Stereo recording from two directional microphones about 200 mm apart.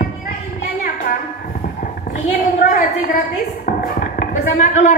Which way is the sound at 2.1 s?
45° left (ahead or behind).